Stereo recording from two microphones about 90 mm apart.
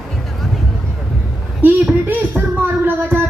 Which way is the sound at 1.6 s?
20° right (ahead or behind).